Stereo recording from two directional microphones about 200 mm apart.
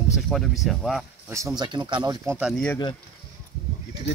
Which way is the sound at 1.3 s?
15° right (ahead or behind).